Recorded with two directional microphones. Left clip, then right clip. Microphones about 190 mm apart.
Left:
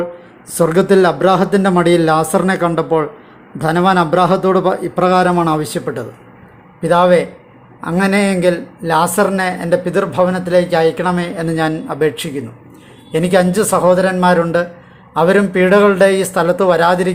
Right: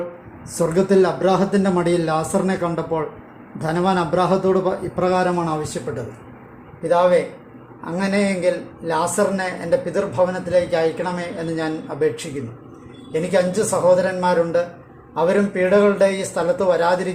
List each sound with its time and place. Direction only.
0.6 s a man's voice: 25° left (ahead or behind)